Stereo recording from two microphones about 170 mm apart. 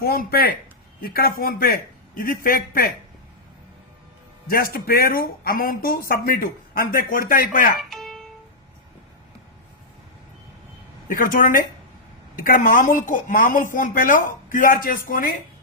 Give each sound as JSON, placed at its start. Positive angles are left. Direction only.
{"t": 0.0, "sound": "speech", "side_deg": 60}
{"t": 4.5, "sound": "speech", "side_deg": 60}
{"t": 7.8, "sound": "music", "side_deg": 0}
{"t": 11.1, "sound": "speech", "side_deg": 55}